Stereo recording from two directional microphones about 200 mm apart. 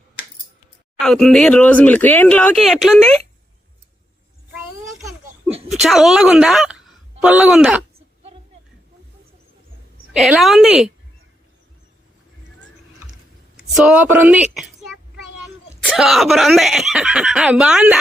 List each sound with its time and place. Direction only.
0.9 s speech: centre (ahead or behind)
5.5 s a sound: 5° right (ahead or behind)
5.8 s speech: centre (ahead or behind)
10.1 s speech: centre (ahead or behind)
13.6 s a woman's voice: 5° right (ahead or behind)
14.5 s a sound: centre (ahead or behind)
15.8 s speech: centre (ahead or behind)